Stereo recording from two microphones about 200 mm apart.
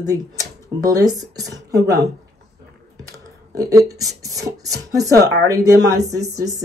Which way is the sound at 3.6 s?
15° right (ahead or behind).